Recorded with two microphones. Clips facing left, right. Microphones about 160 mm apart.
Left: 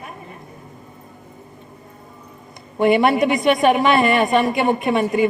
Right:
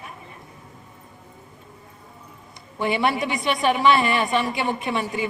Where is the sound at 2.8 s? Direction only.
45° left (ahead or behind).